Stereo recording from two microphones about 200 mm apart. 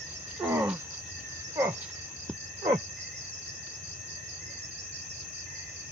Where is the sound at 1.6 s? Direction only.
15° right (ahead or behind).